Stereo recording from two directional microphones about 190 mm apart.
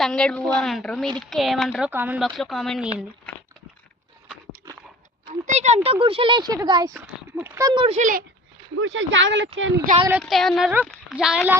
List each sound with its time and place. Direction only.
0.0 s a woman's voice: 5° left (ahead or behind)
2.2 s a woman's voice: centre (ahead or behind)
4.7 s a sound: 15° right (ahead or behind)
5.3 s speech: 35° right (ahead or behind)
7.9 s speech: 40° right (ahead or behind)
8.8 s speech: 90° right; by 9.5 s 75° right (ahead or behind)
9.6 s speech: 90° right
10.1 s a woman's voice: centre (ahead or behind)